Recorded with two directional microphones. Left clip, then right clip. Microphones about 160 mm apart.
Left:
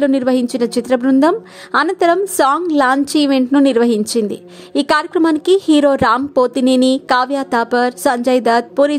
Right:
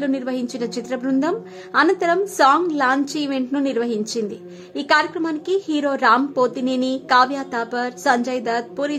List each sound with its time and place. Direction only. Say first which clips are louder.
0.0 s a woman's voice: left 9 dB; 40° left (ahead or behind)